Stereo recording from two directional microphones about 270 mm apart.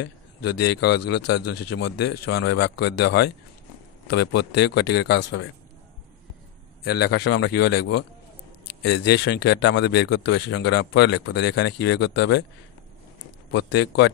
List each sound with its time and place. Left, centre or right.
0.0 s a sound: left
0.7 s speech: left
6.8 s speech: left
13.5 s speech: left